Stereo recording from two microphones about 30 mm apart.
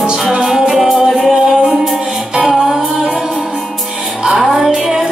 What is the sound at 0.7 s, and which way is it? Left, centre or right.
Music, centre.